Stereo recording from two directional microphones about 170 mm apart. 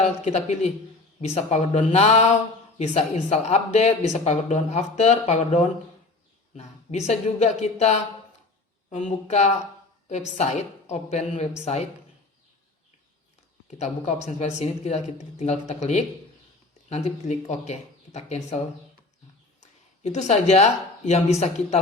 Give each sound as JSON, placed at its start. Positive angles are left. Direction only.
{"t": 0.0, "sound": "speech", "side_deg": 40}
{"t": 13.7, "sound": "speech", "side_deg": 40}